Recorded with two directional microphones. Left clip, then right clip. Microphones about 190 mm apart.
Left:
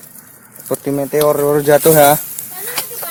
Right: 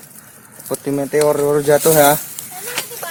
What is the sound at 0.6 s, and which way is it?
Speech, 30° left (ahead or behind).